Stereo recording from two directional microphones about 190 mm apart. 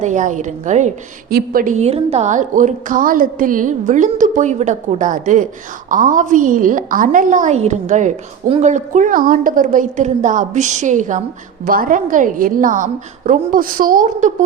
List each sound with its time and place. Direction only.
0.0 s a woman's voice: 40° right (ahead or behind)
1.3 s a woman's voice: 50° right (ahead or behind)